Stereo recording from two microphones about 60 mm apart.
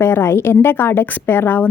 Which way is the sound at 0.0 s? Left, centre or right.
Left.